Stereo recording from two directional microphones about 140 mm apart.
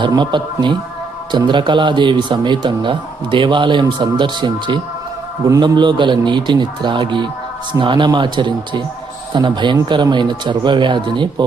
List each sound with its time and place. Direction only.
0.1 s a man's voice: 35° right (ahead or behind)